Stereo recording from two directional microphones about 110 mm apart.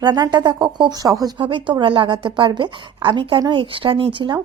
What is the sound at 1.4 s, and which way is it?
Speech, 50° right (ahead or behind).